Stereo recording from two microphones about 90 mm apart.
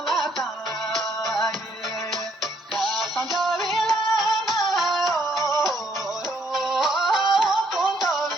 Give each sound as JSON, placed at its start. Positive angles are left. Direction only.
{"t": 0.1, "sound": "music", "side_deg": 0}
{"t": 2.7, "sound": "music", "side_deg": 0}
{"t": 5.4, "sound": "music", "side_deg": -45}
{"t": 6.5, "sound": "music", "side_deg": -5}